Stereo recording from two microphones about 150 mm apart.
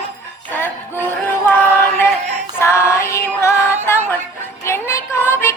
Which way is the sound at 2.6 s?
20° left (ahead or behind).